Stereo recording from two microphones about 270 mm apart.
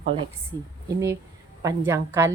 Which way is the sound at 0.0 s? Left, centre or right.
Centre.